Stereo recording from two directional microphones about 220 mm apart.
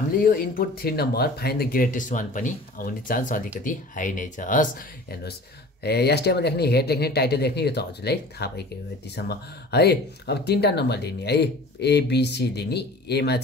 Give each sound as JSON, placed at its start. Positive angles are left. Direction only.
{"t": 0.2, "sound": "speech", "side_deg": 40}
{"t": 5.9, "sound": "speech", "side_deg": 45}